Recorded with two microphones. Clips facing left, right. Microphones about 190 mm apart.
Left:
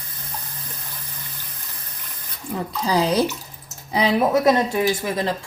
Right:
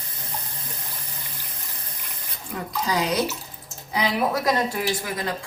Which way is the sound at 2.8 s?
30° left (ahead or behind).